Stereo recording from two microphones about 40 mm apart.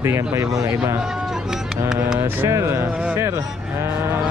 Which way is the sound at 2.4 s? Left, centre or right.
Right.